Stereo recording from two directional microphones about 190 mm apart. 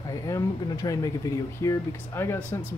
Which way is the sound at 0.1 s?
15° left (ahead or behind).